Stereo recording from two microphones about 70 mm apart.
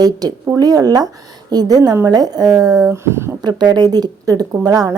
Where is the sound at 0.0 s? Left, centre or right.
Right.